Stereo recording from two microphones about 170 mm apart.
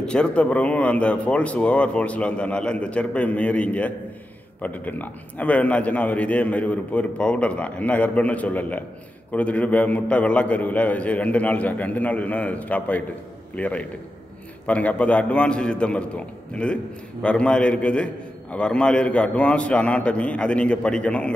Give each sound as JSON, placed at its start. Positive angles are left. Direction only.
{"t": 0.0, "sound": "a man's voice", "side_deg": 5}